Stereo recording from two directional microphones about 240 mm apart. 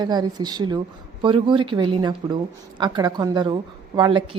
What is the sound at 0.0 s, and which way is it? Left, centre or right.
A woman's voice, centre.